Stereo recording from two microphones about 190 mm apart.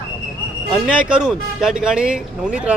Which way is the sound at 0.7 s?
5° right (ahead or behind).